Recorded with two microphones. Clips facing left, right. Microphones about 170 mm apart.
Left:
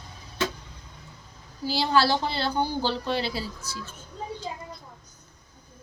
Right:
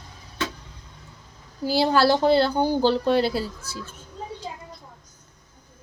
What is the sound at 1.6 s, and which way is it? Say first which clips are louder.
A woman's voice: right 4 dB; 50° right (ahead or behind).